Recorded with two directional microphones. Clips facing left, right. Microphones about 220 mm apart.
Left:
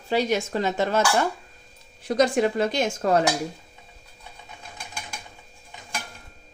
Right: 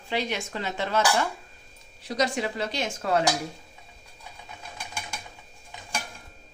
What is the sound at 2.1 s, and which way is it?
Speech, 50° left (ahead or behind).